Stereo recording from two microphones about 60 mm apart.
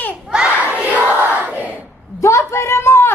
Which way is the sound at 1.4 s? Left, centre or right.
Right.